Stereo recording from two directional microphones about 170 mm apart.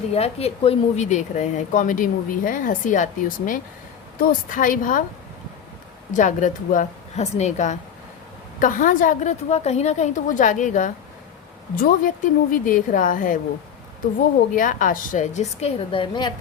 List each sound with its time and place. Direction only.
0.1 s a woman's voice: 35° left (ahead or behind)
6.1 s a woman's voice: 45° left (ahead or behind)
14.5 s a woman's voice: 50° left (ahead or behind); by 16.3 s 30° left (ahead or behind)